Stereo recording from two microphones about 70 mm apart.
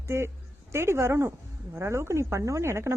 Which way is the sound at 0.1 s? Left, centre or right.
Right.